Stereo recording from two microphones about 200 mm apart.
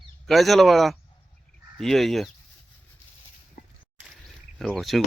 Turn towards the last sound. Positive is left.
turn(degrees=0)  # may be behind; listen again after turning